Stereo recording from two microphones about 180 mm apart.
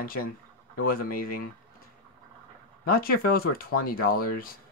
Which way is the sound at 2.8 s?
55° left (ahead or behind).